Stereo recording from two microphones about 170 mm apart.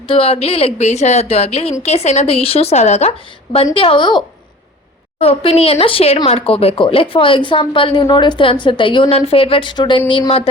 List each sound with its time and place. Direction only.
0.1 s a woman's voice: 35° left (ahead or behind)
5.2 s speech: 35° left (ahead or behind)